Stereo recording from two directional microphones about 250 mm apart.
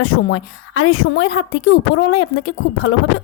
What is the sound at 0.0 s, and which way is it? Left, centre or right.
Speech, left.